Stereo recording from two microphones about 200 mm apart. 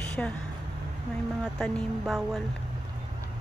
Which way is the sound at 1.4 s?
Centre (ahead or behind).